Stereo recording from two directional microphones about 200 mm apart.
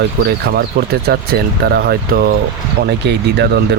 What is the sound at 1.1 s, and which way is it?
Speech, 50° right (ahead or behind).